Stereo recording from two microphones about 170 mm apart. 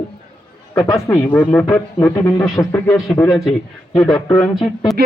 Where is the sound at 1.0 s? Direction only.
15° left (ahead or behind).